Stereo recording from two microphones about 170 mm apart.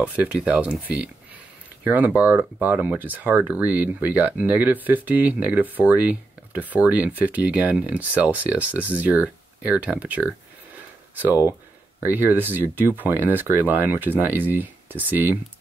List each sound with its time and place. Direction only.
0.0 s speech: 10° right (ahead or behind)